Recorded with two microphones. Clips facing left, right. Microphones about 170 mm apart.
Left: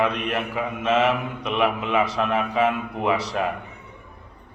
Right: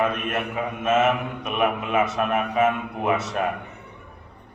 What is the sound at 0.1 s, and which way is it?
Speech, 20° left (ahead or behind).